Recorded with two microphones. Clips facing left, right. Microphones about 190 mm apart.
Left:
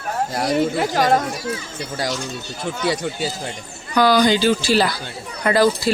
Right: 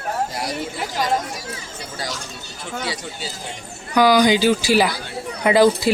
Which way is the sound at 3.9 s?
10° right (ahead or behind).